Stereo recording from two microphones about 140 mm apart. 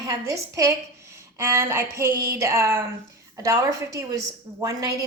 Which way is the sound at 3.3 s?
20° right (ahead or behind).